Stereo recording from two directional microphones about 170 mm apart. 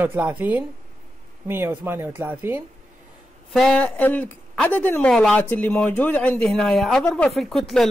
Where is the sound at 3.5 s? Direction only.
5° left (ahead or behind).